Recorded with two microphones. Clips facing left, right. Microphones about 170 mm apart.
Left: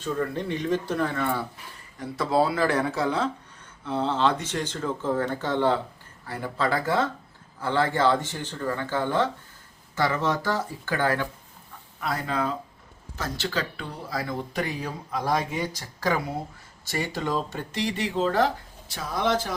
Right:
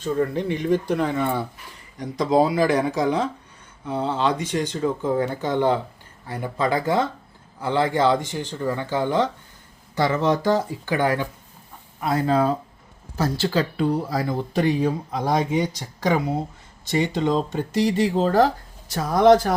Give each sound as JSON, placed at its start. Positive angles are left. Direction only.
{"t": 0.0, "sound": "speech", "side_deg": -10}
{"t": 17.7, "sound": "speech", "side_deg": -35}